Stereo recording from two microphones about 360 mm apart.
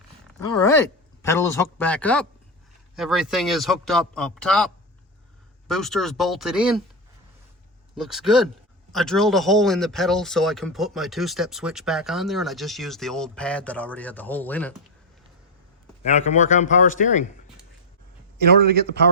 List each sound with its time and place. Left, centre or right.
0.6 s speech: centre
7.9 s speech: centre
16.0 s speech: centre